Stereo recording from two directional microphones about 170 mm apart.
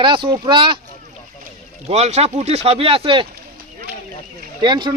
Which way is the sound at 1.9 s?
40° right (ahead or behind).